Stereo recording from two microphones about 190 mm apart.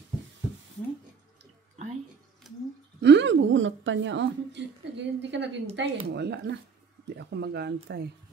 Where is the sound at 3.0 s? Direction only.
70° right (ahead or behind).